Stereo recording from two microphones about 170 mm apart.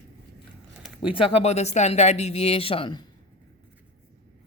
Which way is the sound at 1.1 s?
40° left (ahead or behind).